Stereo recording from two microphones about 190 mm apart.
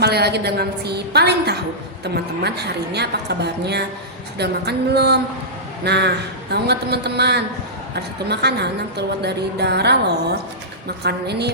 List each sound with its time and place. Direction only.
0.0 s a woman's voice: 60° right (ahead or behind)